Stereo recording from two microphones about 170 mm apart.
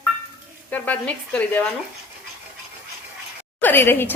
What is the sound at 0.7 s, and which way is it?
Speech, 10° left (ahead or behind).